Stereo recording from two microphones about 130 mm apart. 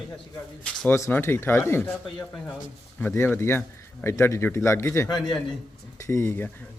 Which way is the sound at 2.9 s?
15° left (ahead or behind).